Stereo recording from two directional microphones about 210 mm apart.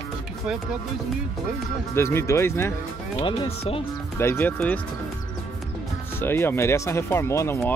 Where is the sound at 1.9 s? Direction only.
10° left (ahead or behind).